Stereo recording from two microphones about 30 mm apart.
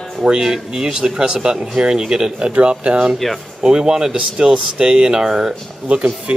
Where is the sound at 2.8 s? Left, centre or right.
Right.